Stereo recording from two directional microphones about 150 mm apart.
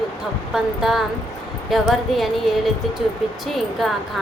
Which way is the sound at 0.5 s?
5° right (ahead or behind).